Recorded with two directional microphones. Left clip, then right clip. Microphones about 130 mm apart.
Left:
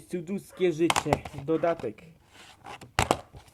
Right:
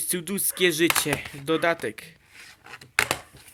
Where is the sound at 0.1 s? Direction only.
20° right (ahead or behind).